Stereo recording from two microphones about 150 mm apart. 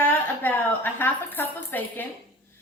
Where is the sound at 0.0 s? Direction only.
15° left (ahead or behind).